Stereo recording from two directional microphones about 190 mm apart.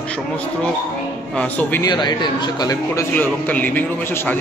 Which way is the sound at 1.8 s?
25° left (ahead or behind).